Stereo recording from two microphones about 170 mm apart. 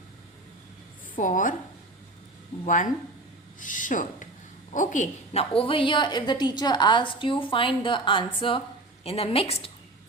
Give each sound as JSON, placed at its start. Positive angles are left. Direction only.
{"t": 1.1, "sound": "a woman's voice", "side_deg": 50}
{"t": 2.6, "sound": "a woman's voice", "side_deg": 50}